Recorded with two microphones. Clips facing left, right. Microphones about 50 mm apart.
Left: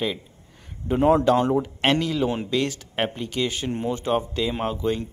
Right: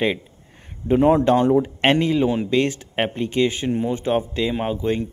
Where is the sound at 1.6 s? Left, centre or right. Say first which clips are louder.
Right 4 dB; right.